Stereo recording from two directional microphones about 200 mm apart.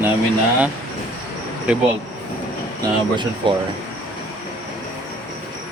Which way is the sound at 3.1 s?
25° right (ahead or behind).